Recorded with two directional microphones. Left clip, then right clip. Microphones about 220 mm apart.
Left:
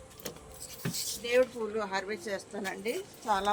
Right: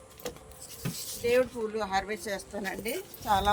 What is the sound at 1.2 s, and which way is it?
Speech, 35° right (ahead or behind).